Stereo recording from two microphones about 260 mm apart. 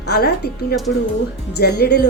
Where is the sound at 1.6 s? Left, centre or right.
Left.